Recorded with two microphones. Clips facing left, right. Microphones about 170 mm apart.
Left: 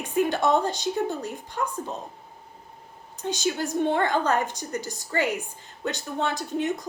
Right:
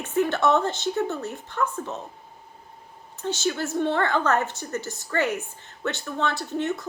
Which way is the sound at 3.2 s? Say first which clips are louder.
Even; 15° left (ahead or behind).